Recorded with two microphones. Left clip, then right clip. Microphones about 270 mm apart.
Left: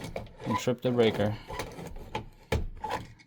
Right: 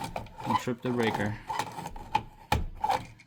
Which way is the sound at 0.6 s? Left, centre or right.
Left.